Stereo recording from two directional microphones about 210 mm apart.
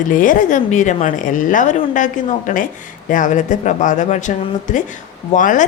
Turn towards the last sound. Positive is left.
turn(degrees=40)  # may be behind; listen again after turning